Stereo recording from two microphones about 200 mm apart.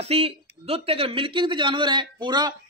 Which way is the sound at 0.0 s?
30° right (ahead or behind).